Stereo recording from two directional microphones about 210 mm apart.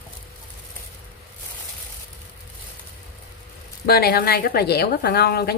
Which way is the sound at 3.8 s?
45° left (ahead or behind).